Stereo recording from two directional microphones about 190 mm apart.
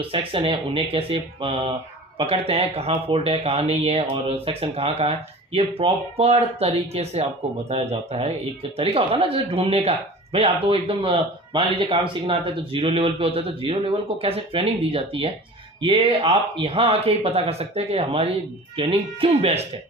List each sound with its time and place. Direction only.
0.1 s speech: 30° right (ahead or behind)